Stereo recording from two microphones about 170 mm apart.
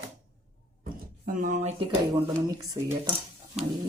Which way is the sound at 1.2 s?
50° right (ahead or behind).